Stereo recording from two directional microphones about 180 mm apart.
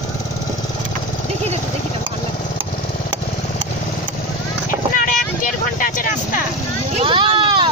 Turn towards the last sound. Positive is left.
turn(degrees=-30)  # may be behind; listen again after turning